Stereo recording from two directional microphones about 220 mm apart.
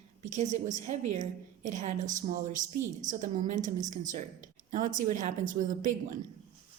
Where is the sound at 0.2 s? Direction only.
30° right (ahead or behind).